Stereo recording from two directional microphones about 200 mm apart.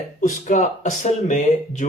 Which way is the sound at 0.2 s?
40° left (ahead or behind).